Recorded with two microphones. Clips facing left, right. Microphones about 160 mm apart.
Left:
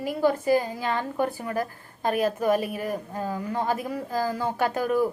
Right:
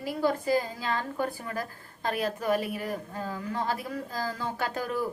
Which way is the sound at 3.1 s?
45° left (ahead or behind).